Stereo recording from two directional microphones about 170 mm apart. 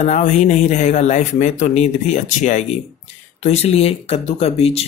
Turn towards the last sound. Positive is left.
turn(degrees=35)  # may be behind; listen again after turning